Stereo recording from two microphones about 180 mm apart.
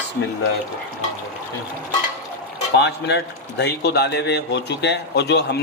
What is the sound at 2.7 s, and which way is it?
Speech, 65° left (ahead or behind).